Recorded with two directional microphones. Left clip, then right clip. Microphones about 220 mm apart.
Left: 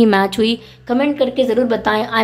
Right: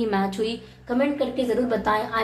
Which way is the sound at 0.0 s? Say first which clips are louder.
Left 11 dB; 40° left (ahead or behind).